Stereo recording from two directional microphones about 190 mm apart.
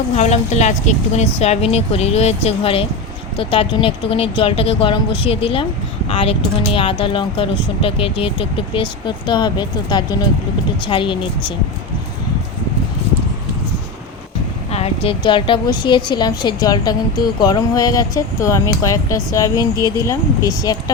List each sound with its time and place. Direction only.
0.2 s a woman's voice: 35° left (ahead or behind)
14.7 s a woman's voice: 30° left (ahead or behind)